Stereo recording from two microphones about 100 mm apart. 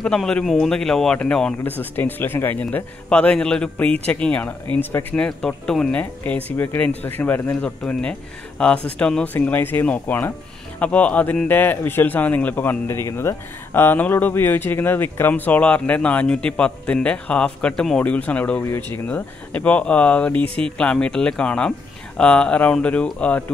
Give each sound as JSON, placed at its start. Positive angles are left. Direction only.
{"t": 0.0, "sound": "speech", "side_deg": 10}